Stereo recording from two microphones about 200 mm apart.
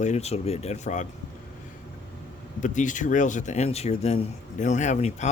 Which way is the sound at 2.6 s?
40° left (ahead or behind).